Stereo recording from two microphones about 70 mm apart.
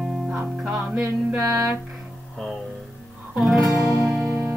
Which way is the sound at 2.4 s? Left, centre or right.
Centre.